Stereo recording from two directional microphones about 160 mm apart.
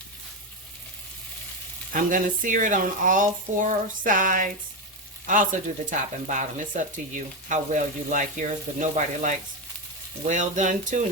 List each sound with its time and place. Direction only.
1.9 s speech: 60° right (ahead or behind)
5.2 s frying: 55° right (ahead or behind)